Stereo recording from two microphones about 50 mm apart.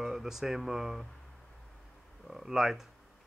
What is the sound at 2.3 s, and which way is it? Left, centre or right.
Speech, centre.